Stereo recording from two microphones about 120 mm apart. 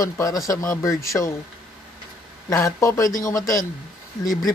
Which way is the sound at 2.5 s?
25° left (ahead or behind).